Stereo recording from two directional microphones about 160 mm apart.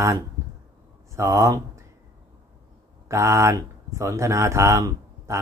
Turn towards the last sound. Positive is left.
turn(degrees=-20)  # may be behind; listen again after turning